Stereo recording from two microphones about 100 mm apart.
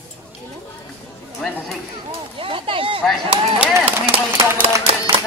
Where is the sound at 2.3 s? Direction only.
60° right (ahead or behind).